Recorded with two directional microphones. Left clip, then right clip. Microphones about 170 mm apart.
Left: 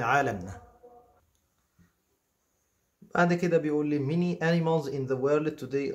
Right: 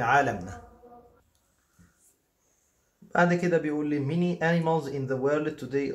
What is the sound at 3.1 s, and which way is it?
Speech, 35° left (ahead or behind).